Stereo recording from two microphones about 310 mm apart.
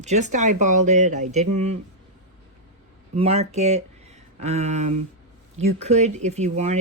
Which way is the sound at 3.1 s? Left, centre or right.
Centre.